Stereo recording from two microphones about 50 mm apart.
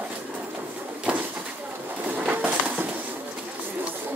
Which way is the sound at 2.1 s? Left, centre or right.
Right.